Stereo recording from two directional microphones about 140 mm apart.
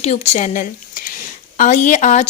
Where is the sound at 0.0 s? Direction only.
55° left (ahead or behind).